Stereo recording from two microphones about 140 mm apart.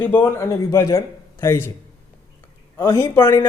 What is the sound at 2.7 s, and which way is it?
Speech, 25° left (ahead or behind).